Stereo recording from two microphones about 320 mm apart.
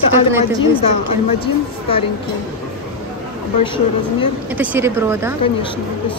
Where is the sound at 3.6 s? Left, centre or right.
Centre.